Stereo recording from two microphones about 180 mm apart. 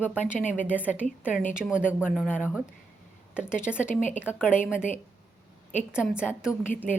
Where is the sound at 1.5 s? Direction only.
5° right (ahead or behind).